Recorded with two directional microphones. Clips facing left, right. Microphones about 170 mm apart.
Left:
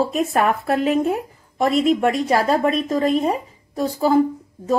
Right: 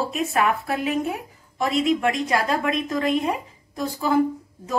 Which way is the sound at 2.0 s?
40° left (ahead or behind).